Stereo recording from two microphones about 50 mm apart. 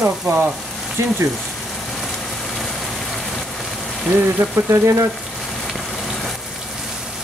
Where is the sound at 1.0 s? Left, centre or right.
Right.